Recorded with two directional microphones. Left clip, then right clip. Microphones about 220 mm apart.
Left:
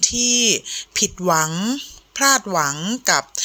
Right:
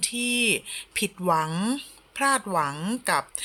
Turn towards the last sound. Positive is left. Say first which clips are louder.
# left 6 dB
turn(degrees=15)  # may be behind; listen again after turning